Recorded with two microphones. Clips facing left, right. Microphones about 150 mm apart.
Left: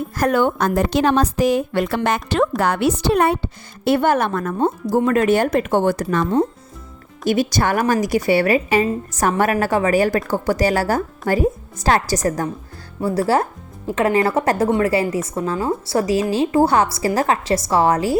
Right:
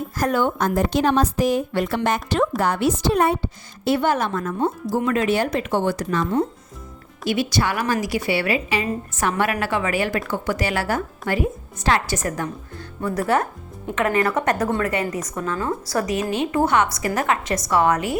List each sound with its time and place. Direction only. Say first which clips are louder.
0.2 s a woman's voice: left 3 dB; 65° left (ahead or behind)
7.3 s a woman's voice: left 4 dB; 45° left (ahead or behind)